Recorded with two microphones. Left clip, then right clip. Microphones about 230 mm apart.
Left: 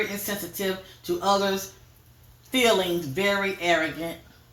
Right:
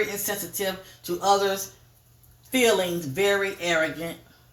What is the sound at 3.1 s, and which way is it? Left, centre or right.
A woman's voice, right.